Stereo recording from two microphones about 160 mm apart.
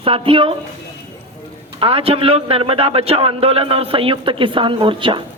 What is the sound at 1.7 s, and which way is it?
A man's voice, 35° right (ahead or behind).